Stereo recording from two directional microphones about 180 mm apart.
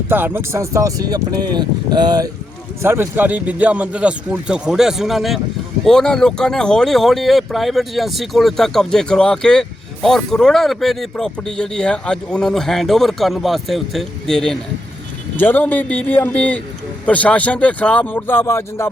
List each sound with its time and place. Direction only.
0.1 s speech: 10° right (ahead or behind); by 18.9 s 15° left (ahead or behind)